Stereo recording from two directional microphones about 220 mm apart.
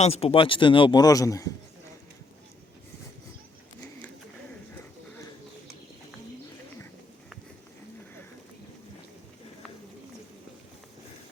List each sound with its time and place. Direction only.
0.0 s a man's voice: 25° left (ahead or behind)